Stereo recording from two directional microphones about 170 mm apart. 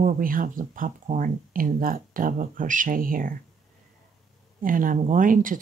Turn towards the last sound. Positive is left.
turn(degrees=-50)  # may be behind; listen again after turning